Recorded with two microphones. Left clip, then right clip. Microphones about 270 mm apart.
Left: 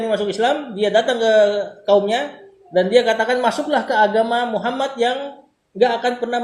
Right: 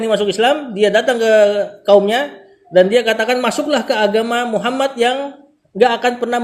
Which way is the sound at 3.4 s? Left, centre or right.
Right.